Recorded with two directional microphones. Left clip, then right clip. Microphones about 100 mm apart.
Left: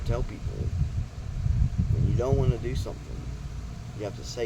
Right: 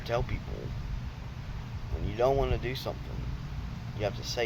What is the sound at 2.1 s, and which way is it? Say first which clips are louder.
Speech: right 2 dB; 5° left (ahead or behind).